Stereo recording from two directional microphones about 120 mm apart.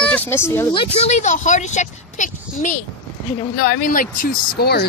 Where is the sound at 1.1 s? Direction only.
90° left.